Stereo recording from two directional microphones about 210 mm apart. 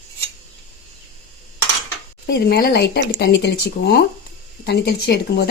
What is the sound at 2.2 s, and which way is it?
Speech, 50° left (ahead or behind).